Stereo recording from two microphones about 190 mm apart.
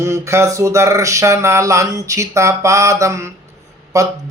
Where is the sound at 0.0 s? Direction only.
15° right (ahead or behind).